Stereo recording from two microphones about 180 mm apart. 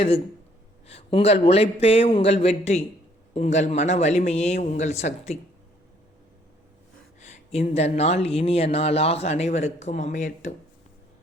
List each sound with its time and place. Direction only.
0.9 s speech: 35° left (ahead or behind)
7.2 s speech: 40° left (ahead or behind)